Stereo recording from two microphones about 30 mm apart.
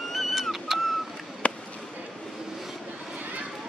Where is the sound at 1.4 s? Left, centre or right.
Left.